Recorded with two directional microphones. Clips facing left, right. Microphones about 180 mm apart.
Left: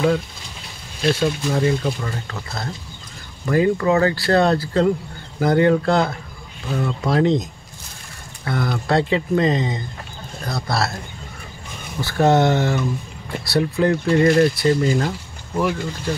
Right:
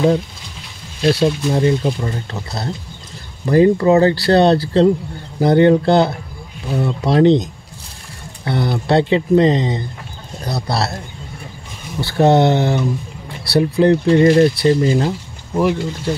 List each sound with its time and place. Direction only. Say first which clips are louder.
1.0 s speech: right 4 dB; 30° right (ahead or behind)
6.7 s speech: right 3 dB; 15° right (ahead or behind)
7.1 s speech: right 6 dB; 30° right (ahead or behind)
8.5 s speech: right 4 dB; 30° right (ahead or behind)
12.2 s speech: right 3 dB; 25° right (ahead or behind)
15.0 s a sound: right 5 dB; 20° right (ahead or behind)